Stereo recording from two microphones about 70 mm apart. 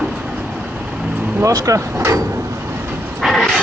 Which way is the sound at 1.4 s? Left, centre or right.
Right.